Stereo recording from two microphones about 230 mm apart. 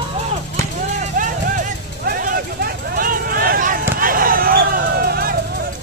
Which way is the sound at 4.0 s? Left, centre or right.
Right.